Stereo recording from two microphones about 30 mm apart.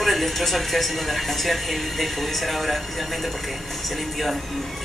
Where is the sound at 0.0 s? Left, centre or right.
Centre.